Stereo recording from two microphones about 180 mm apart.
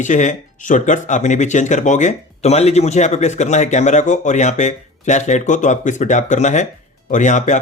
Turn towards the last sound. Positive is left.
turn(degrees=40)  # may be behind; listen again after turning